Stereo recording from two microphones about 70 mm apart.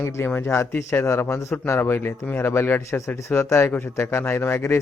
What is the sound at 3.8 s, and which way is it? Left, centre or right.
Speech, left.